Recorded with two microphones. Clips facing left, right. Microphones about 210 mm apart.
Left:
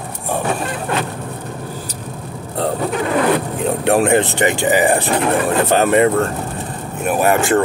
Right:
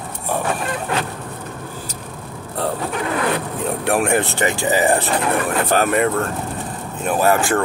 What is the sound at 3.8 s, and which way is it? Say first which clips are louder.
Speech: left 4 dB; 25° left (ahead or behind).